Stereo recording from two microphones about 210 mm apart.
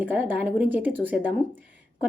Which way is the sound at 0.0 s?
5° right (ahead or behind).